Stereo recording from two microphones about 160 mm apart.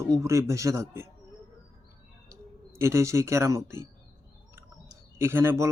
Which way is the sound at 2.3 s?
15° right (ahead or behind).